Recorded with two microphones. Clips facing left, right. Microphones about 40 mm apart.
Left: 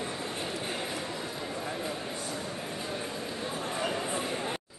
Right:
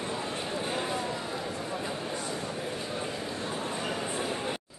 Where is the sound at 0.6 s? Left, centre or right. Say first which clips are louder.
Right 3 dB; centre.